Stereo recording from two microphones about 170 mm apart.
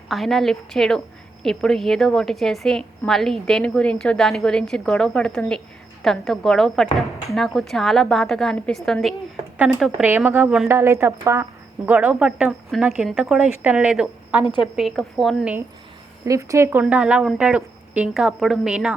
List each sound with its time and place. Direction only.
0.1 s a woman's voice: centre (ahead or behind)
10.0 s a woman's voice: 10° right (ahead or behind)
16.2 s speech: 20° right (ahead or behind)
16.8 s a woman's voice: 5° right (ahead or behind)